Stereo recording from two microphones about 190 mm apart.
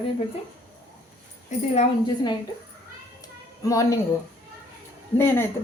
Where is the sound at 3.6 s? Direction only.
15° left (ahead or behind).